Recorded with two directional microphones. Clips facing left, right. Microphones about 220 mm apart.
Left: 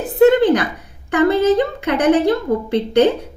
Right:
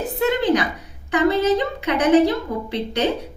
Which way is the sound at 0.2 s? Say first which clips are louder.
Left 8 dB; 50° left (ahead or behind).